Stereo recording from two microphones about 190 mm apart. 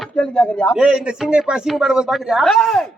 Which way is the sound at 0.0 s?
5° left (ahead or behind).